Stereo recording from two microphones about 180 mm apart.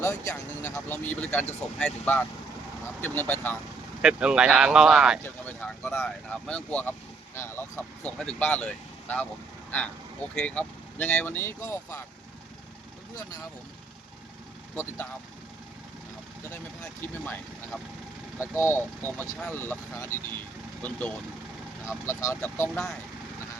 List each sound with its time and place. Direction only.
0.0 s speech: 15° left (ahead or behind)
4.0 s speech: 5° right (ahead or behind)
5.2 s speech: 10° left (ahead or behind)
10.3 s speech: 5° left (ahead or behind)
16.5 s speech: 10° left (ahead or behind)
21.8 s speech: 15° left (ahead or behind)